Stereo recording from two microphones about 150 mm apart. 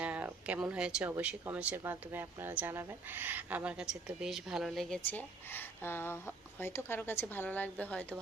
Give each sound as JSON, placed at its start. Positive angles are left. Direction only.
{"t": 0.0, "sound": "speech", "side_deg": -10}
{"t": 5.5, "sound": "a woman's voice", "side_deg": 15}